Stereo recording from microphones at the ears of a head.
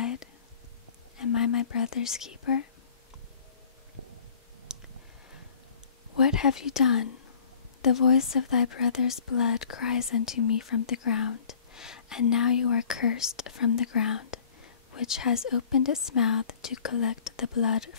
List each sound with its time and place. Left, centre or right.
1.1 s whispering: left
6.2 s speech: left